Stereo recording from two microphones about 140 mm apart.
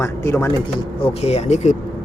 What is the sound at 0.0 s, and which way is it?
Speech, 20° left (ahead or behind).